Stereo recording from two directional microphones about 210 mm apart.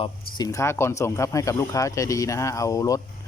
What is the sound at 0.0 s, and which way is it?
Speech, 20° left (ahead or behind).